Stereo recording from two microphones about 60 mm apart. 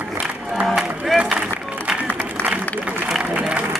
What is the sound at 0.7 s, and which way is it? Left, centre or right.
Music, centre.